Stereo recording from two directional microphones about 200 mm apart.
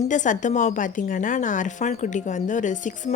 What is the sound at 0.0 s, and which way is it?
A woman's voice, 40° left (ahead or behind).